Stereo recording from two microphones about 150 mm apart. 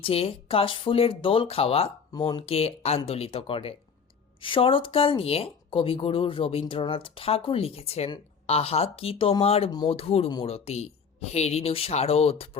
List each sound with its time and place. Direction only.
0.0 s speech: 40° left (ahead or behind)
9.6 s speech: 30° left (ahead or behind)